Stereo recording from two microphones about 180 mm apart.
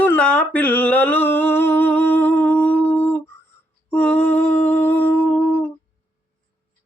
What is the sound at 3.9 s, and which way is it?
Humming, 10° left (ahead or behind).